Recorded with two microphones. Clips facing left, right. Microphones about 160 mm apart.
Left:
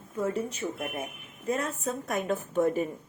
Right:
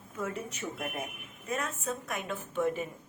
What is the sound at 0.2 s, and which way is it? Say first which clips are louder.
A woman's voice: left 6 dB; 30° left (ahead or behind).